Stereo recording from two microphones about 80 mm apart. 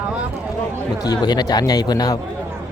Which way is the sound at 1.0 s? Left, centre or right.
Left.